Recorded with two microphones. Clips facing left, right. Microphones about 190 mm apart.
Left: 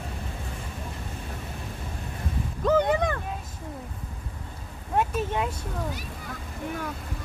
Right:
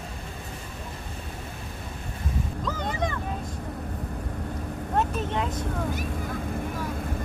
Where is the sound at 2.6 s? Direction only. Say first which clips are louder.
Left 10 dB; 60° left (ahead or behind).